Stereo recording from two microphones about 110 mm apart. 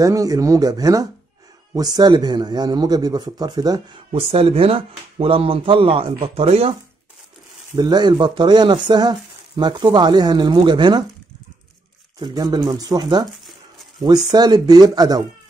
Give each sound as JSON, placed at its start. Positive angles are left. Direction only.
{"t": 0.0, "sound": "a man's voice", "side_deg": -30}
{"t": 4.1, "sound": "speech", "side_deg": -60}
{"t": 7.7, "sound": "a man's voice", "side_deg": -40}
{"t": 12.2, "sound": "a man's voice", "side_deg": -35}